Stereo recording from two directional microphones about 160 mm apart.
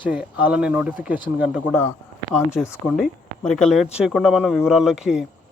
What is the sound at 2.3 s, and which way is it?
Speech, 5° right (ahead or behind).